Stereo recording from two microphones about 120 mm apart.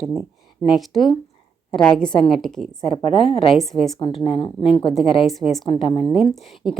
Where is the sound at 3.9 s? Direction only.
50° left (ahead or behind).